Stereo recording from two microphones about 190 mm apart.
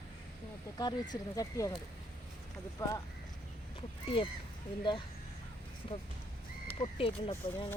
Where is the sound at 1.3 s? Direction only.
20° left (ahead or behind).